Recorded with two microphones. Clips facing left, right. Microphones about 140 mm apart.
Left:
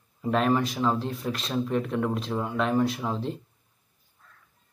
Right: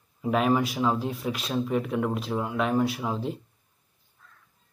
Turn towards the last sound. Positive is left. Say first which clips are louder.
# even
turn(degrees=-5)  # may be behind; listen again after turning